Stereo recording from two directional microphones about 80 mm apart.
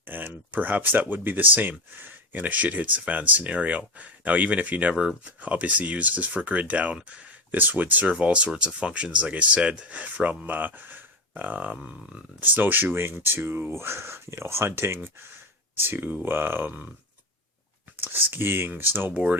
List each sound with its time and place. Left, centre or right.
0.0 s speech: right
12.4 s speech: right
18.0 s speech: right